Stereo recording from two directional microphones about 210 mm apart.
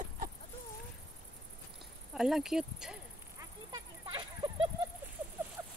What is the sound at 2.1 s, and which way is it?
Speech, centre (ahead or behind).